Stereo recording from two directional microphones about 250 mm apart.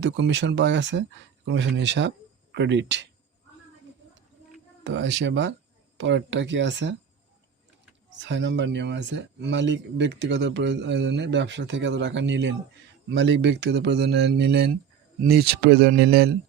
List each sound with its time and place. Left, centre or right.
0.0 s speech: right
4.8 s speech: right
8.2 s speech: right